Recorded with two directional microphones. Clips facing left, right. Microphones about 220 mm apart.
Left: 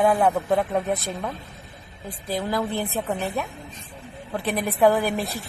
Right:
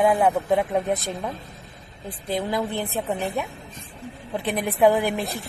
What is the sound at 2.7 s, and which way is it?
A woman's voice, 15° right (ahead or behind).